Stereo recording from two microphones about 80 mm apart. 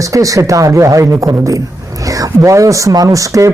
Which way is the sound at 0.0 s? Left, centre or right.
Right.